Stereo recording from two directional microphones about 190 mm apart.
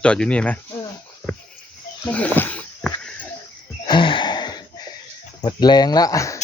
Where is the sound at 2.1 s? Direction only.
10° left (ahead or behind).